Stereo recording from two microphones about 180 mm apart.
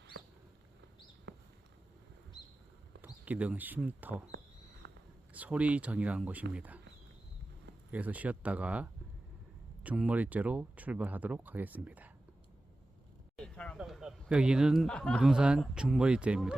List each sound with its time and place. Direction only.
1.3 s a sound: 75° right (ahead or behind)
3.0 s speech: 10° right (ahead or behind)
4.8 s whispering: 75° right (ahead or behind)
5.3 s speech: 5° right (ahead or behind)
7.9 s speech: 10° right (ahead or behind)
13.3 s a sound: 5° left (ahead or behind)
13.7 s a man's voice: centre (ahead or behind)